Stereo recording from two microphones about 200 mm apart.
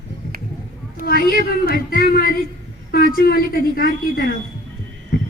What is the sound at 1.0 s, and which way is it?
A woman's voice, 50° left (ahead or behind).